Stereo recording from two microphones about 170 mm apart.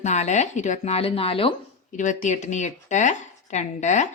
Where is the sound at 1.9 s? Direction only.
45° left (ahead or behind).